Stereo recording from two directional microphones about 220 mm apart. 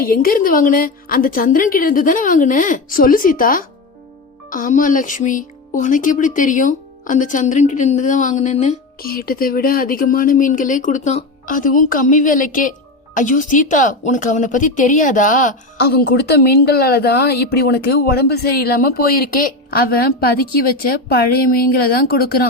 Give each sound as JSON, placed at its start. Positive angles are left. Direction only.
{"t": 0.0, "sound": "a woman's voice", "side_deg": 40}